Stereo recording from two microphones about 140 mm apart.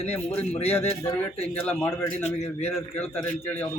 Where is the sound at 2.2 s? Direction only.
50° left (ahead or behind).